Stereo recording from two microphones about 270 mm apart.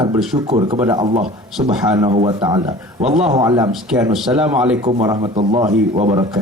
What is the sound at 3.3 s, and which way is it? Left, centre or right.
Speech, centre.